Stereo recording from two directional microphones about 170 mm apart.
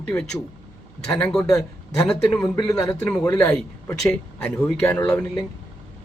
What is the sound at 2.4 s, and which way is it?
A man's voice, 20° left (ahead or behind).